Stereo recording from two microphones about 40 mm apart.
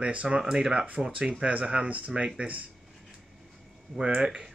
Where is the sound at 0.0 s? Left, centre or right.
Right.